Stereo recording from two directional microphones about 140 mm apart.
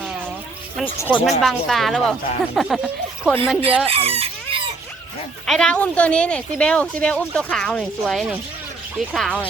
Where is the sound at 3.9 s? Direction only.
45° right (ahead or behind).